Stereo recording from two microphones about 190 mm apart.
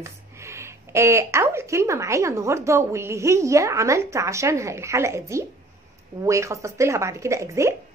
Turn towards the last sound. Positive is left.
turn(degrees=-15)  # may be behind; listen again after turning